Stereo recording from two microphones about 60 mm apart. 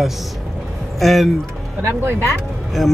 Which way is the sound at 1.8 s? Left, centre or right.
Right.